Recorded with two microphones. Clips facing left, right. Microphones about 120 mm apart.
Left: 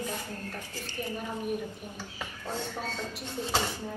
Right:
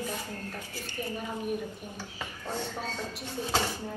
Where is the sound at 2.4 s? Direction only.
15° right (ahead or behind).